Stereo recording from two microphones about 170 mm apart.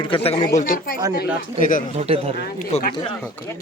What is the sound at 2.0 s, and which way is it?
Speech, 35° right (ahead or behind).